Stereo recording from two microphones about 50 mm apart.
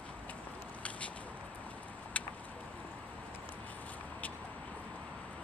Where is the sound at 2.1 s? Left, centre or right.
Left.